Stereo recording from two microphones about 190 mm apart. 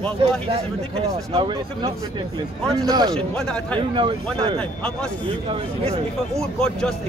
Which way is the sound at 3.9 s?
25° right (ahead or behind).